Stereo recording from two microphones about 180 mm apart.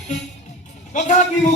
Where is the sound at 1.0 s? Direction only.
40° left (ahead or behind).